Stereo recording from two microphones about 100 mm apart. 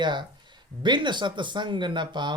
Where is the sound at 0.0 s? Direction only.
50° right (ahead or behind).